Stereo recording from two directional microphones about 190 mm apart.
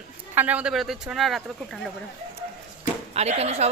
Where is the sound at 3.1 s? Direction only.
35° right (ahead or behind).